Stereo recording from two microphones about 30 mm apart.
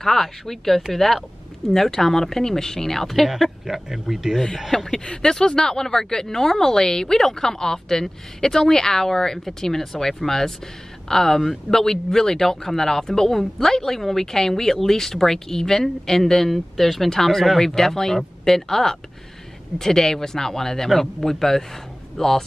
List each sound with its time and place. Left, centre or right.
0.0 s speech: centre
1.7 s speech: centre
3.3 s speech: centre
4.9 s speech: left; by 22.4 s centre